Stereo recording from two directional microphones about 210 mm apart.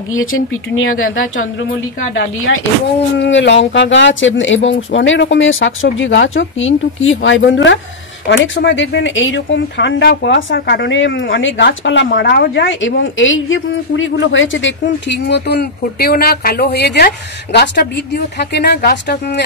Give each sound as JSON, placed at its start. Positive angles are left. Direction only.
{"t": 0.1, "sound": "speech", "side_deg": 75}
{"t": 3.2, "sound": "speech", "side_deg": 60}